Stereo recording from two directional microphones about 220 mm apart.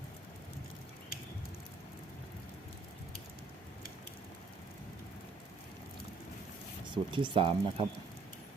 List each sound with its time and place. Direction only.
6.9 s speech: 20° right (ahead or behind)